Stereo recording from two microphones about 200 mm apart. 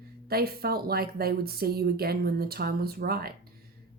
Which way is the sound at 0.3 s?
50° right (ahead or behind).